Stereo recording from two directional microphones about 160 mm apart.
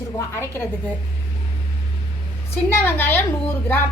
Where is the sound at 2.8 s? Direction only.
15° left (ahead or behind).